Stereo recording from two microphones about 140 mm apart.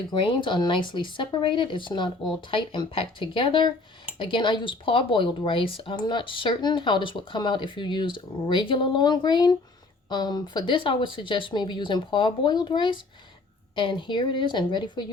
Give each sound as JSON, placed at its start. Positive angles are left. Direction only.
{"t": 0.1, "sound": "speech", "side_deg": 35}